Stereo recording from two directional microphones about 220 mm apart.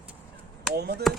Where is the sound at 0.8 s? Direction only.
45° right (ahead or behind).